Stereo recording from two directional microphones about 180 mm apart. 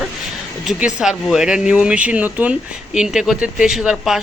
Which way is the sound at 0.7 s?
5° right (ahead or behind).